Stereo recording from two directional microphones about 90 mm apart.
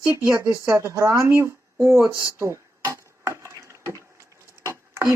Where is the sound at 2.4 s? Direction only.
30° right (ahead or behind).